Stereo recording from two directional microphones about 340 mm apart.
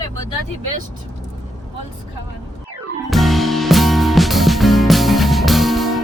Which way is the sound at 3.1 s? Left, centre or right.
Centre.